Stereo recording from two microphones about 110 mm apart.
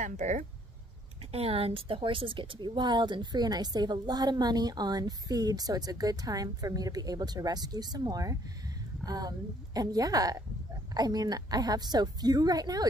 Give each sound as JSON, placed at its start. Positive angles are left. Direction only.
{"t": 0.2, "sound": "speech", "side_deg": -90}
{"t": 1.3, "sound": "a woman's voice", "side_deg": -65}